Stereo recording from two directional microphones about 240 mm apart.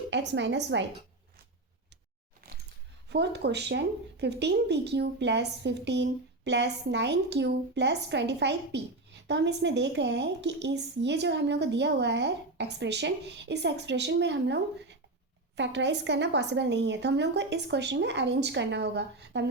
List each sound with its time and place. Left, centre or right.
0.1 s a woman's voice: right
3.1 s a woman's voice: right